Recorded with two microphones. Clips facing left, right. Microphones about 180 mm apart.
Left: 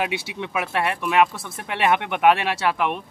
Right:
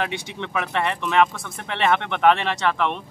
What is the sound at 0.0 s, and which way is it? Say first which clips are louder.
Speech: left 1 dB; 10° left (ahead or behind).